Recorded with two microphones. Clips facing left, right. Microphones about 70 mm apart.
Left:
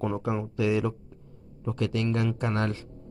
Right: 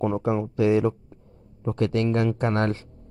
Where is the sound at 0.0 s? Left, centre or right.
Right.